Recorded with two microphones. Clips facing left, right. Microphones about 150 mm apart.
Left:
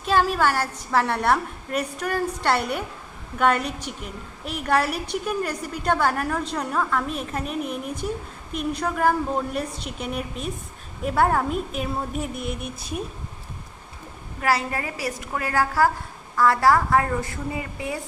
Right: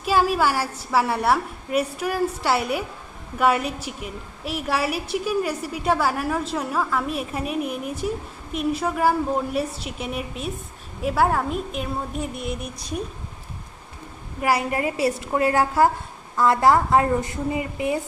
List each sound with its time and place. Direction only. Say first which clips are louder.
0.0 s a woman's voice: right 1 dB; 10° right (ahead or behind)
14.4 s a woman's voice: right 2 dB; 15° right (ahead or behind)